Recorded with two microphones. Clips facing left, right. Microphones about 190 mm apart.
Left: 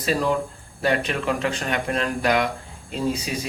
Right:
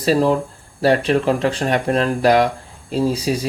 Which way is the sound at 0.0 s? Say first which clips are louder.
Right 6 dB; 35° right (ahead or behind).